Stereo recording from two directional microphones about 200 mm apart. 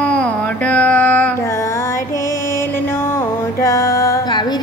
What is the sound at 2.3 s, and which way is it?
Music, 15° left (ahead or behind).